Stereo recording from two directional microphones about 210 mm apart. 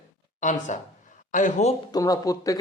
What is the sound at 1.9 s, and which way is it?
Speech, 15° left (ahead or behind).